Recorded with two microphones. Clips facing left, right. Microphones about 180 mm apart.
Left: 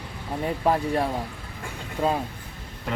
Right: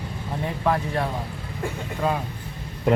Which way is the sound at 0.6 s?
20° left (ahead or behind).